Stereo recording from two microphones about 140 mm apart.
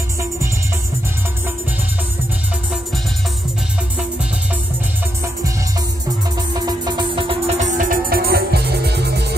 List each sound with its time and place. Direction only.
6.3 s music: 30° right (ahead or behind)
7.5 s music: 60° right (ahead or behind); by 8.4 s 90° right